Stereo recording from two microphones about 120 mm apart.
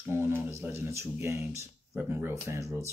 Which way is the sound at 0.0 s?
20° right (ahead or behind).